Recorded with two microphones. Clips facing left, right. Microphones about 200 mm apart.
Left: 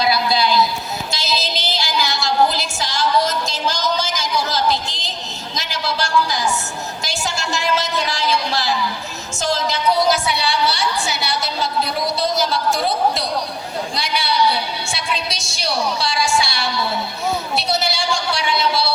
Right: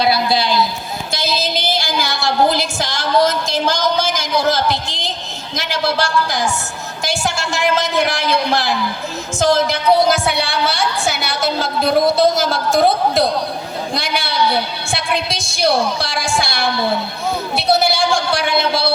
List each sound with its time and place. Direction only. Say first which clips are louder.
1.1 s music: right 5 dB; 55° right (ahead or behind)
5.5 s a man's voice: right 6 dB; 55° right (ahead or behind)